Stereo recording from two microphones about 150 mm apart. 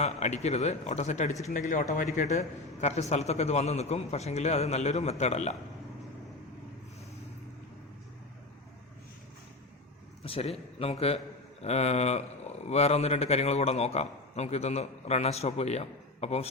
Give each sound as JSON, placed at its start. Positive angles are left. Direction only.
{"t": 0.0, "sound": "speech", "side_deg": 50}
{"t": 10.2, "sound": "a man's voice", "side_deg": 40}